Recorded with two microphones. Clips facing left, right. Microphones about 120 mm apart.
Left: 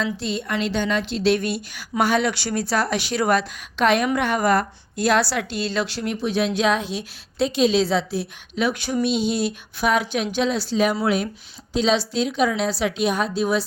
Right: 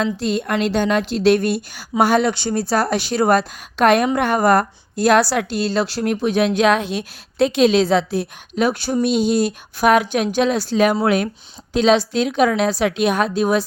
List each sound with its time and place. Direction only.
0.0 s a woman's voice: 45° right (ahead or behind)
2.3 s a woman's voice: 30° right (ahead or behind); by 13.7 s 50° right (ahead or behind)